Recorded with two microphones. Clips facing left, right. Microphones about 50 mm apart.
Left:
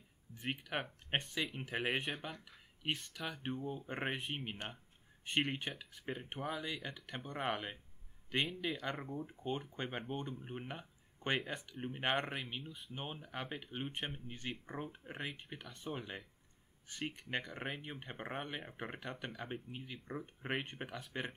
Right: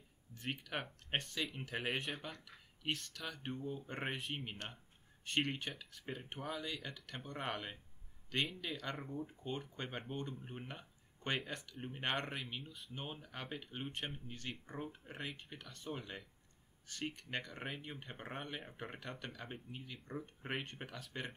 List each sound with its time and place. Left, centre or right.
0.3 s speech: centre